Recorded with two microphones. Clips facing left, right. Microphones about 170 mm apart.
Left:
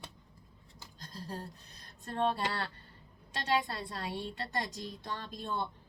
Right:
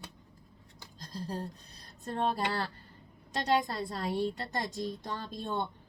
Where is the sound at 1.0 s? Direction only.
35° right (ahead or behind).